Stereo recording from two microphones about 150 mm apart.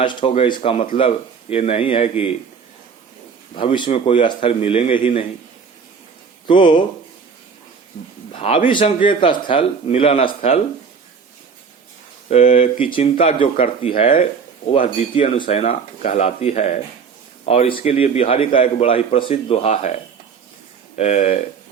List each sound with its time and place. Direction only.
0.0 s speech: 35° left (ahead or behind)
3.5 s speech: 35° left (ahead or behind)
6.5 s speech: 35° left (ahead or behind)
8.3 s speech: 40° left (ahead or behind)
12.3 s a man's voice: 45° left (ahead or behind)